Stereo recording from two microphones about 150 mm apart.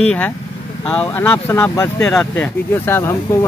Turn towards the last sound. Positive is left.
turn(degrees=20)  # may be behind; listen again after turning